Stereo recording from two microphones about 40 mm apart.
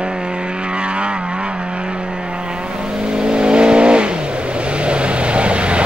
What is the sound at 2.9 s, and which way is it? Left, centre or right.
Vehicle, right.